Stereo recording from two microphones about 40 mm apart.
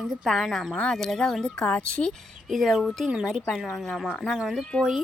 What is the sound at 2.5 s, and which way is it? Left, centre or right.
Speech, centre.